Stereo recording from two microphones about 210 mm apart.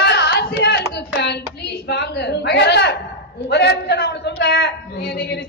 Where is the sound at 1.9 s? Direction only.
55° left (ahead or behind).